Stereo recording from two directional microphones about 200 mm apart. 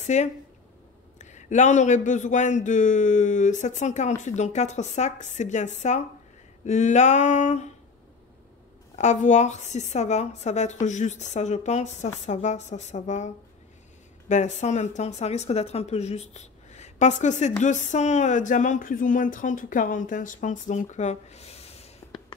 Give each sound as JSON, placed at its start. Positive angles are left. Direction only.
{"t": 0.0, "sound": "speech", "side_deg": 35}
{"t": 8.9, "sound": "speech", "side_deg": 35}
{"t": 14.3, "sound": "speech", "side_deg": 35}